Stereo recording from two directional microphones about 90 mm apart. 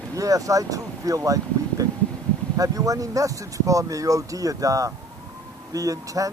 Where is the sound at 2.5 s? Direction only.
40° right (ahead or behind).